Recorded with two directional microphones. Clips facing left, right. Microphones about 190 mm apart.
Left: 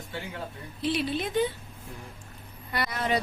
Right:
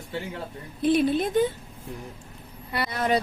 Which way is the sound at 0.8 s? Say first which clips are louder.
Right 7 dB; 50° right (ahead or behind).